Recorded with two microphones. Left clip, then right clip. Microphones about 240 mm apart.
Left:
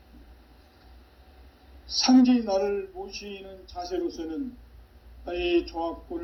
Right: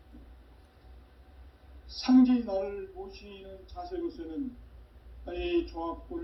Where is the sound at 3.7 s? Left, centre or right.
Left.